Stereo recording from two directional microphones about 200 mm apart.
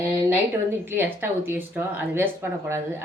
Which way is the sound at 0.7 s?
10° right (ahead or behind).